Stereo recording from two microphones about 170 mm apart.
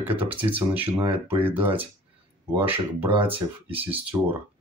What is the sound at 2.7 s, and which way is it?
Speech, 30° right (ahead or behind).